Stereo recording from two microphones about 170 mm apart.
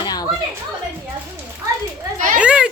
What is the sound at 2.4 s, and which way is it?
Children playing, 5° right (ahead or behind).